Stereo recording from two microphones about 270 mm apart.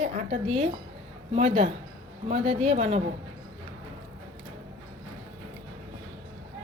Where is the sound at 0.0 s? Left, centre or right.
Right.